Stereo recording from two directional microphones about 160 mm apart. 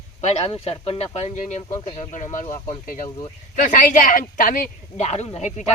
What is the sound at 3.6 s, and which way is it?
Speech, 55° left (ahead or behind).